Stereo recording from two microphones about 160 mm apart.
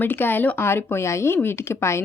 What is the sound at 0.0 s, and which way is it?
Speech, 10° left (ahead or behind).